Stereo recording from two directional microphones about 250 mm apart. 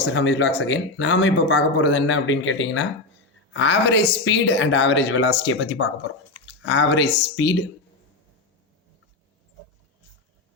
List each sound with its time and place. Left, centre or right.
0.0 s speech: left